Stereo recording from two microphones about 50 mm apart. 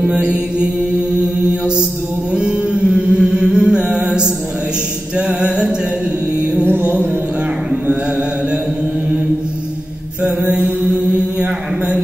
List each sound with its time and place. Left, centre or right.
0.0 s mantra: right
2.3 s music: right
5.1 s music: right
6.6 s music: right
10.2 s mantra: right